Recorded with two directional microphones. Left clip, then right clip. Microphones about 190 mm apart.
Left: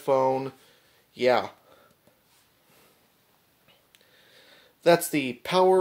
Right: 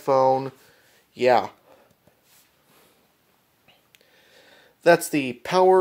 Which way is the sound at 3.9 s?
20° right (ahead or behind).